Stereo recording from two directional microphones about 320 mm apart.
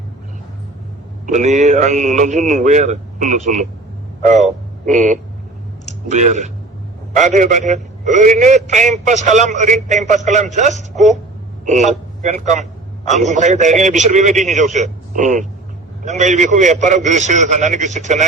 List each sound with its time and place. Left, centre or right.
1.3 s a man's voice: right